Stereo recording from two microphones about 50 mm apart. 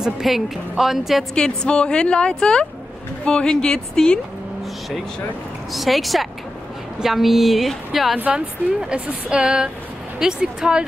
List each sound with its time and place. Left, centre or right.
0.0 s speech: centre
1.3 s a woman's voice: centre
5.7 s speech: centre
8.4 s speech: centre